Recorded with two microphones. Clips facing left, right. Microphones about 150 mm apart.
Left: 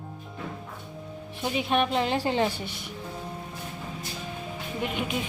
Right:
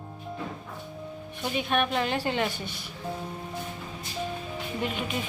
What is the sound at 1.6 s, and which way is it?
A woman's voice, 25° left (ahead or behind).